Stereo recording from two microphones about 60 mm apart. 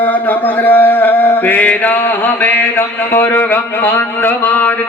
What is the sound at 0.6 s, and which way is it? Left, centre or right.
Speech, left.